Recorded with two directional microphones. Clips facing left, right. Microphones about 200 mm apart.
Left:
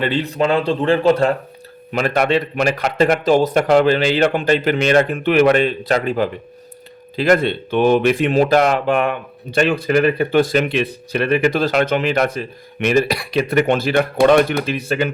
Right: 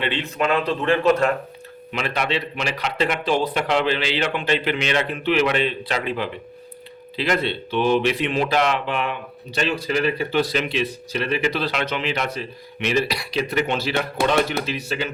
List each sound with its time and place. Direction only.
0.0 s speech: 35° left (ahead or behind)
1.9 s speech: 45° left (ahead or behind)